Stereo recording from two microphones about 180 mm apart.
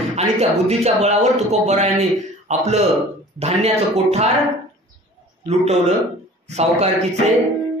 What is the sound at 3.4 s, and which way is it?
Speech, 35° right (ahead or behind).